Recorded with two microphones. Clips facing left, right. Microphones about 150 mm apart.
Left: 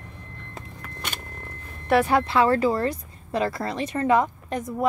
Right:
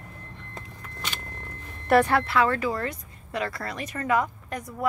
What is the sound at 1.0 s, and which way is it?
Vehicle, 60° left (ahead or behind).